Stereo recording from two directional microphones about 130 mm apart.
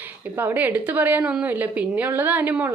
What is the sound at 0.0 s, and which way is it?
A woman's voice, 15° right (ahead or behind).